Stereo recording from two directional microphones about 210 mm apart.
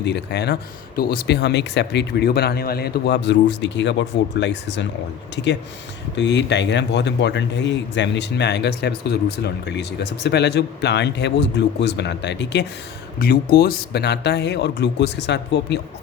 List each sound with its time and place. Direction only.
0.0 s speech: 55° left (ahead or behind)
6.1 s speech: 55° left (ahead or behind)
13.1 s speech: 45° left (ahead or behind)